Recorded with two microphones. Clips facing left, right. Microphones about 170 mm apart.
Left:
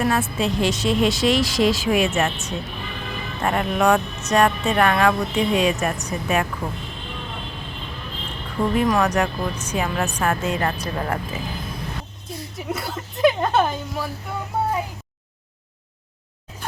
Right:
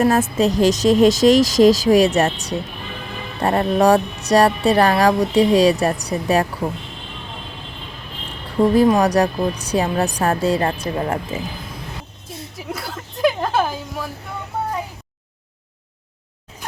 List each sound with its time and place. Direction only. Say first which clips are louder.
0.0 s speech: right 6 dB; 40° right (ahead or behind)
8.7 s speech: right 4 dB; 35° right (ahead or behind)
12.3 s a woman's voice: left 2 dB; centre (ahead or behind)